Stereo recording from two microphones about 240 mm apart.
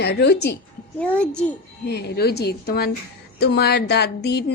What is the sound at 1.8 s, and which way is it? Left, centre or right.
A woman's voice, left.